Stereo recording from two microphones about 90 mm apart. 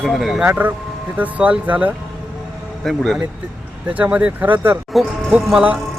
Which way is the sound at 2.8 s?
Centre (ahead or behind).